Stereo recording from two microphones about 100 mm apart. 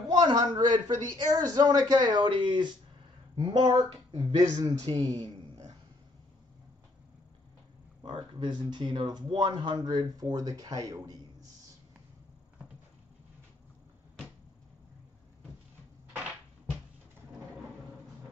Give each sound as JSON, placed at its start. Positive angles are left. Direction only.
{"t": 0.1, "sound": "speech", "side_deg": -45}
{"t": 4.8, "sound": "speech", "side_deg": -35}
{"t": 8.0, "sound": "speech", "side_deg": -50}